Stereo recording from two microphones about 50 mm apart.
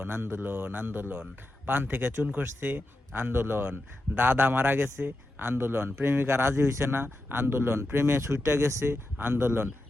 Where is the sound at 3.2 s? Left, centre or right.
Right.